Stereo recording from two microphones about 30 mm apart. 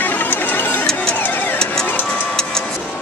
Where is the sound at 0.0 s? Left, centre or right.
Left.